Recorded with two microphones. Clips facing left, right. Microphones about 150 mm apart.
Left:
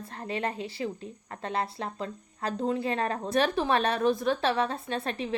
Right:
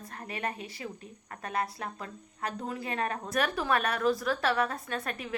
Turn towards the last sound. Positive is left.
turn(degrees=25)  # may be behind; listen again after turning